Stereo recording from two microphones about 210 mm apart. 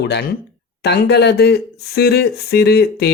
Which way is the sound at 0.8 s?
50° left (ahead or behind).